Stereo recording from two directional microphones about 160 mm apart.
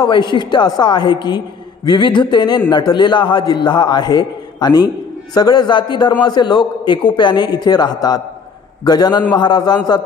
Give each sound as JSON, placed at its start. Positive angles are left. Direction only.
{"t": 0.0, "sound": "a man's voice", "side_deg": 30}